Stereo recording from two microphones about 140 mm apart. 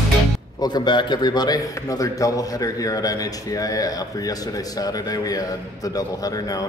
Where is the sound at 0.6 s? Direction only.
30° left (ahead or behind).